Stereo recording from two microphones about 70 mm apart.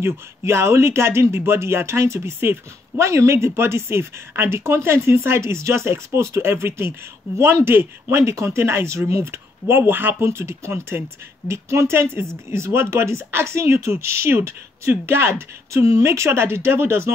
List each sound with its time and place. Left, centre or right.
0.0 s speech: right